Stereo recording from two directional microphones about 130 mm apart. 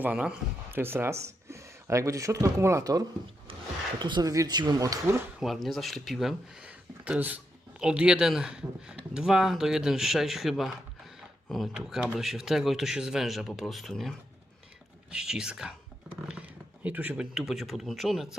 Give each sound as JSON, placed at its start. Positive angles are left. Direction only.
{"t": 0.0, "sound": "speech", "side_deg": -10}
{"t": 5.4, "sound": "speech", "side_deg": 0}
{"t": 17.3, "sound": "speech", "side_deg": 0}